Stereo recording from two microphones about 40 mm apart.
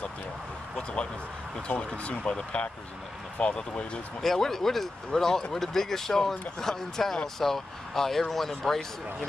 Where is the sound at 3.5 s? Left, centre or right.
Left.